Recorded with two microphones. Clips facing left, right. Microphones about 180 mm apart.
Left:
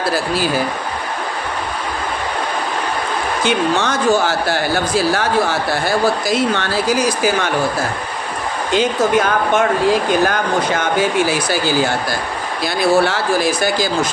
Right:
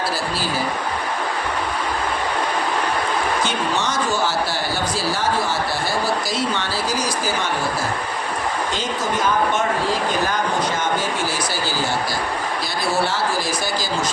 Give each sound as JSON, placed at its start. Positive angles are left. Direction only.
{"t": 3.4, "sound": "speech", "side_deg": 60}
{"t": 8.7, "sound": "speech", "side_deg": 65}